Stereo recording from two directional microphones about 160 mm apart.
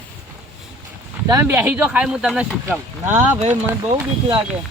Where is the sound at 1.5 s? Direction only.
10° right (ahead or behind).